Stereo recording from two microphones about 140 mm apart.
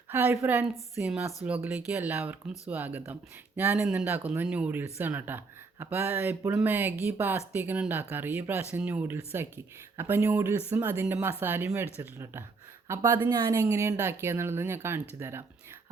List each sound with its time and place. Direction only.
0.1 s speech: 15° right (ahead or behind)